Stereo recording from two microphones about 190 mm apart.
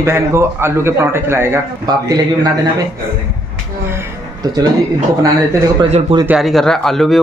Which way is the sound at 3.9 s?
15° right (ahead or behind).